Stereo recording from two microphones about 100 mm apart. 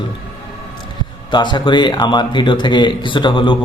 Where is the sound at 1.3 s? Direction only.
50° left (ahead or behind).